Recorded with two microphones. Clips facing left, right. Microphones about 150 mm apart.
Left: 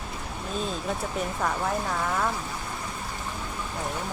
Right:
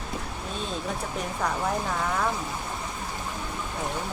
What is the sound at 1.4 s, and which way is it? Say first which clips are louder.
Speech: right 1 dB; centre (ahead or behind).